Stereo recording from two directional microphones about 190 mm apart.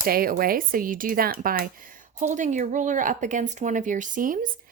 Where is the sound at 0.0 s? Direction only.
50° right (ahead or behind).